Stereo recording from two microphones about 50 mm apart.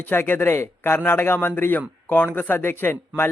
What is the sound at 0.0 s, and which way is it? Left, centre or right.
A man's voice, left.